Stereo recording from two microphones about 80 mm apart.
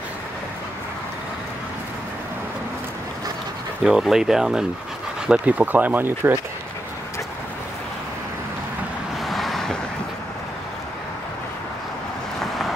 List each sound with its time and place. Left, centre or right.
3.8 s speech: centre; by 6.3 s right
9.2 s vehicle: centre
12.4 s vehicle: centre